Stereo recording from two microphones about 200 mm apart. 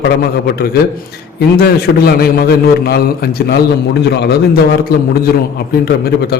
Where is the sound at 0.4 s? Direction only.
50° left (ahead or behind).